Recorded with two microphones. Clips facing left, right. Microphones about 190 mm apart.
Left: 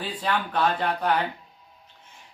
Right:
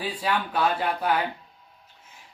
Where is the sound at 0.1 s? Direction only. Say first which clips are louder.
Left 2 dB; 10° right (ahead or behind).